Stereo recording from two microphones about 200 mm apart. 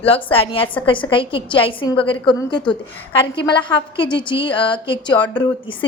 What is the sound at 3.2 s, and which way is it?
A woman's voice, 20° left (ahead or behind).